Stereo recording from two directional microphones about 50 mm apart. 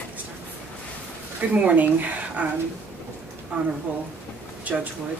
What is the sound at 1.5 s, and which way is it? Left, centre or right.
A woman's voice, right.